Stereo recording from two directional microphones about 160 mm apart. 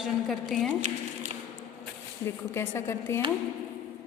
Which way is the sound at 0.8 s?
50° right (ahead or behind).